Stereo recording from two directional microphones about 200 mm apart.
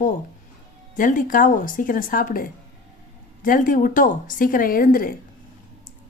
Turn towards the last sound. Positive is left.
turn(degrees=45)  # may be behind; listen again after turning